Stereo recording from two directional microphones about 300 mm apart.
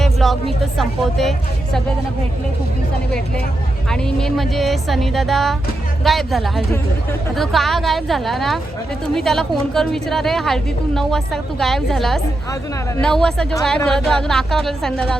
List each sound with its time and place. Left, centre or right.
0.0 s a woman's voice: centre
3.8 s a woman's voice: centre